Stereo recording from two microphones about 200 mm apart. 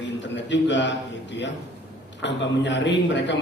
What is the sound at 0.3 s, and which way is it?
A man's voice, 65° left (ahead or behind).